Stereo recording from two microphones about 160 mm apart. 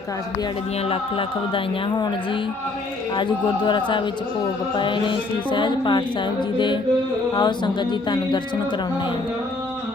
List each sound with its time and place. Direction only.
0.9 s speech: 35° left (ahead or behind)
3.2 s speech: 30° left (ahead or behind)
7.3 s speech: 30° left (ahead or behind)